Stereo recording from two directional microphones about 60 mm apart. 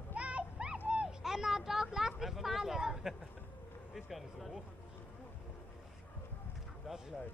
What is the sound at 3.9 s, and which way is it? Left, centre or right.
Speech, centre.